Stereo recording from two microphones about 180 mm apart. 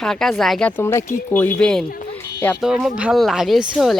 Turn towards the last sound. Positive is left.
turn(degrees=0)  # may be behind; listen again after turning